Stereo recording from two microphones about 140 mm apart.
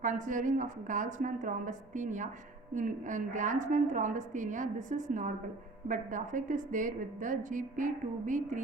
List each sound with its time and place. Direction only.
0.0 s a woman's voice: 65° right (ahead or behind)